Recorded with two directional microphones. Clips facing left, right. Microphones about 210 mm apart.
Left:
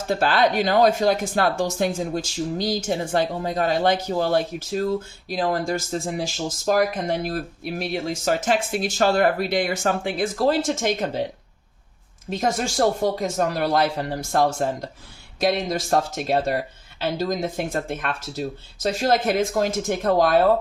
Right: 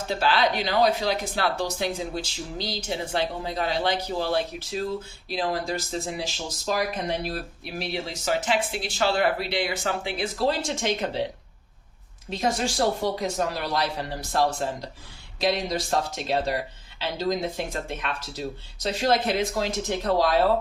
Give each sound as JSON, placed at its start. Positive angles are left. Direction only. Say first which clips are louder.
{"t": 0.1, "sound": "speech", "louder": "left 4 dB", "side_deg": 45}
{"t": 12.3, "sound": "speech", "louder": "left 2 dB", "side_deg": 50}